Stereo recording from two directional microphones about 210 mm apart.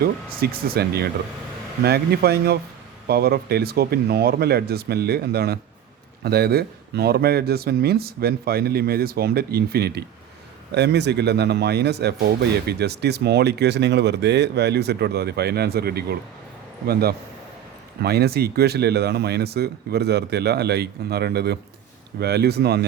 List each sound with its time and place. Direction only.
0.3 s speech: 45° right (ahead or behind)